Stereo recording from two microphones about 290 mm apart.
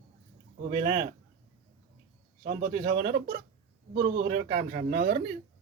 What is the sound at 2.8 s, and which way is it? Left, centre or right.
Speech, right.